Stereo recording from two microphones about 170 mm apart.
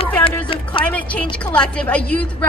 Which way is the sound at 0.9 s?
10° left (ahead or behind).